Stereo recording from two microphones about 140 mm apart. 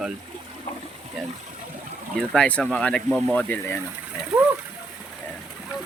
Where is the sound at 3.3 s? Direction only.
15° left (ahead or behind).